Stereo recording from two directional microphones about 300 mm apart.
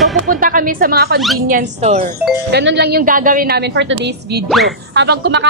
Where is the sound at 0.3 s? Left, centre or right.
Right.